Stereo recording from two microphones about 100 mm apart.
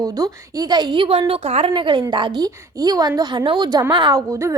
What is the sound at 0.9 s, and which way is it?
A woman's voice, 75° right (ahead or behind).